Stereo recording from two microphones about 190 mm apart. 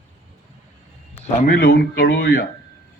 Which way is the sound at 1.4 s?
50° left (ahead or behind).